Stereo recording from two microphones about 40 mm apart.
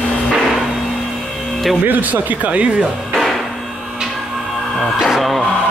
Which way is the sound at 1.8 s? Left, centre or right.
Right.